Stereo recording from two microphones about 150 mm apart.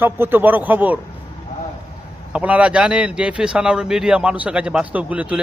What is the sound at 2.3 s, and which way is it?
Speech, 10° right (ahead or behind).